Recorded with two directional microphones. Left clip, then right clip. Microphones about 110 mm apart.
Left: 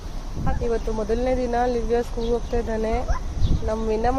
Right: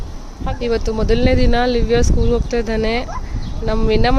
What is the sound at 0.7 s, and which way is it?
Speech, 90° right.